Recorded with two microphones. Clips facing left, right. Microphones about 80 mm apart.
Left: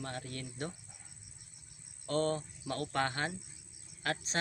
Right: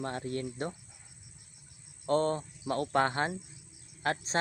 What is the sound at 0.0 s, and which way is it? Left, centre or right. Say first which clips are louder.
Speech: right 7 dB; right.